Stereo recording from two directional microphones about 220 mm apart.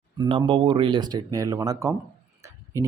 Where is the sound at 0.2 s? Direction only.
25° right (ahead or behind).